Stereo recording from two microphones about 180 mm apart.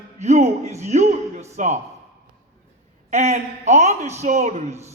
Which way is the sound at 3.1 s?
40° right (ahead or behind).